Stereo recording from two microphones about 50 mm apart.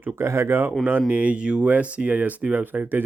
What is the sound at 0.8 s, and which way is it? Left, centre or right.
Speech, right.